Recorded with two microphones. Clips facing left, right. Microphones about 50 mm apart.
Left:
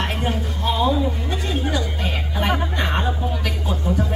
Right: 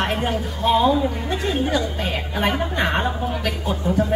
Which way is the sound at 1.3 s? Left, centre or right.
Centre.